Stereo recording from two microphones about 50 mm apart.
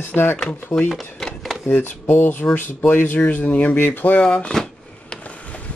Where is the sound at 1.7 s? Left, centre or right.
Left.